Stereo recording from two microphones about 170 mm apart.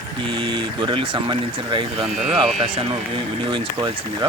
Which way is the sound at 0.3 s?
30° right (ahead or behind).